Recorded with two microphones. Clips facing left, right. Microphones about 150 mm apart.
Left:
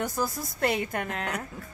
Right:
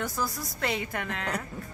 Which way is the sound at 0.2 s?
50° left (ahead or behind).